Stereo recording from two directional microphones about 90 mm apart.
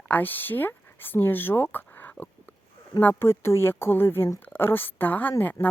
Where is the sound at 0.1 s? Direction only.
20° left (ahead or behind).